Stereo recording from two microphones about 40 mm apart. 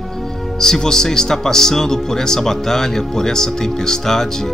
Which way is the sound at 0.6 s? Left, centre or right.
Centre.